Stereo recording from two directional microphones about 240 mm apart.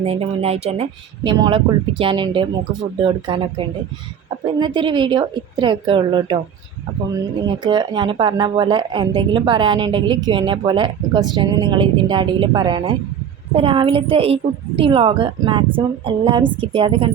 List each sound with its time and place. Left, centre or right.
0.0 s speech: right
4.6 s speech: centre
7.4 s speech: centre